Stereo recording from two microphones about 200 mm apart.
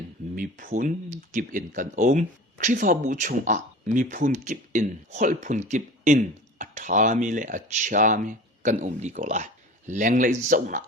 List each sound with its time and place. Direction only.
0.3 s speech: 40° right (ahead or behind)